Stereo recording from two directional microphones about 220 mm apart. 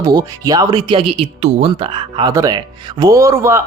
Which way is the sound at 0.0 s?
15° right (ahead or behind).